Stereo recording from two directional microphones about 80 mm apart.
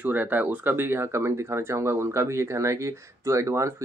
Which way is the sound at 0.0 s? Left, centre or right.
Right.